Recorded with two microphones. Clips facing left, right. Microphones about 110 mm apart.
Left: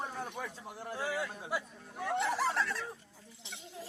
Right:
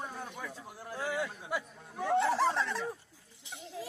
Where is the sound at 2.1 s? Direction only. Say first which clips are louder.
Right 4 dB; 20° right (ahead or behind).